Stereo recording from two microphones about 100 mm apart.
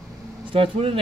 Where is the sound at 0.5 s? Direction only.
65° right (ahead or behind).